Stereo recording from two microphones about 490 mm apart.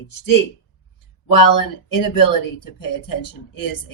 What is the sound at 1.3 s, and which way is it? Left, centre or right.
Speech, left.